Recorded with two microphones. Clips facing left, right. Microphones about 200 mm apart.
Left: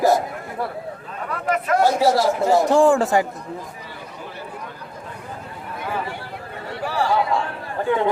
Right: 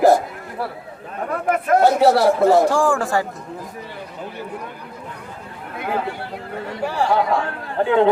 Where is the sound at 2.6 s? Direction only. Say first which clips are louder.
Left 3 dB; 20° left (ahead or behind).